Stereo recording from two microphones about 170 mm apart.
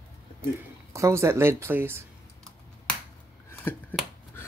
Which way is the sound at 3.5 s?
10° left (ahead or behind).